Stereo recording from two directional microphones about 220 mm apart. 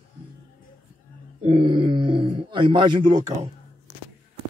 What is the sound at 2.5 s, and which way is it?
Speech, 20° right (ahead or behind).